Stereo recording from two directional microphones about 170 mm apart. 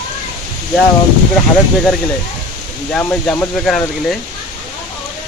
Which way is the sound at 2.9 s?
10° left (ahead or behind).